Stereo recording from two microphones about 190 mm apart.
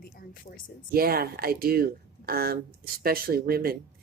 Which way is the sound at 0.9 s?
50° right (ahead or behind).